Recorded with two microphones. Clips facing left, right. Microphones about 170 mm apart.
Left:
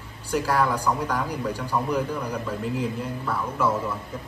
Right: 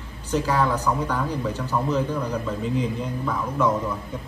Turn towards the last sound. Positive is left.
turn(degrees=5)  # may be behind; listen again after turning